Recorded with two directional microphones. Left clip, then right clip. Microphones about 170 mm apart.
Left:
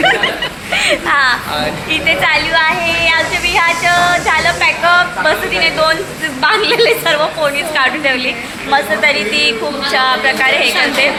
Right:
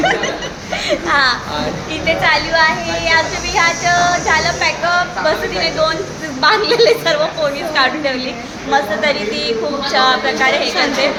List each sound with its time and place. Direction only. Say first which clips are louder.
0.8 s speech: left 2 dB; 5° left (ahead or behind)